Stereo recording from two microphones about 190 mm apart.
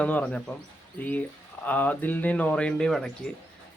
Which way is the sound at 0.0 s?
5° left (ahead or behind).